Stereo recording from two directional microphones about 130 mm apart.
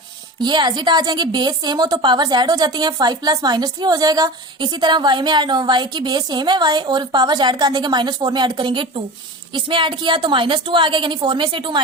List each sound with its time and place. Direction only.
0.4 s a woman's voice: 35° right (ahead or behind)